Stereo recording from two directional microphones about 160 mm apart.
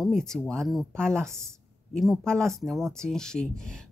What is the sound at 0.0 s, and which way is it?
A woman's voice, 5° left (ahead or behind).